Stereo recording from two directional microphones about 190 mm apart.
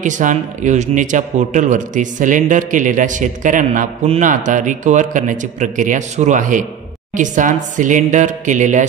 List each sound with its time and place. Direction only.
0.0 s a man's voice: 40° right (ahead or behind)